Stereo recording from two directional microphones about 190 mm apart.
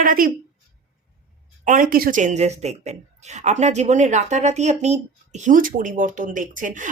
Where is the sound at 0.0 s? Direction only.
45° right (ahead or behind).